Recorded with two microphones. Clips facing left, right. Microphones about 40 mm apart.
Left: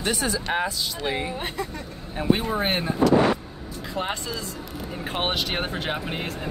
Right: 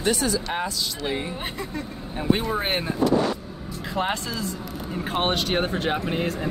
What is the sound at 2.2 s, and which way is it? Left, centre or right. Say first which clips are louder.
Speech: left 1 dB; centre.